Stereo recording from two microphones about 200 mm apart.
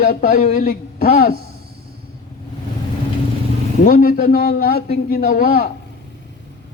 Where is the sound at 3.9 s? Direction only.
45° left (ahead or behind).